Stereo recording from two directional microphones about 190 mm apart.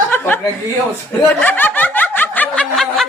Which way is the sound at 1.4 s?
10° left (ahead or behind).